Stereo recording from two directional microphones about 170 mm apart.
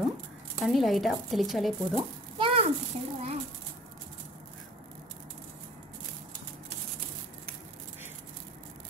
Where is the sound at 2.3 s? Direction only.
30° right (ahead or behind).